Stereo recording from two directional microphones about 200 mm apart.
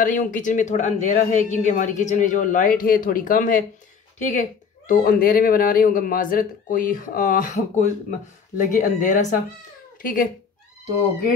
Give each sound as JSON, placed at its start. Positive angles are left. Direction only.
{"t": 0.0, "sound": "speech", "side_deg": 40}